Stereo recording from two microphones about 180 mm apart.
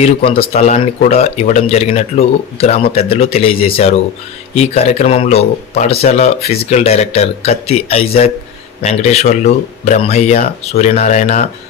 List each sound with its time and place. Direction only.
0.0 s speech: 30° left (ahead or behind)